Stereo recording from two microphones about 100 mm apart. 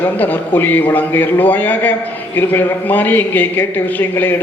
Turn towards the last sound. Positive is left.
turn(degrees=20)  # may be behind; listen again after turning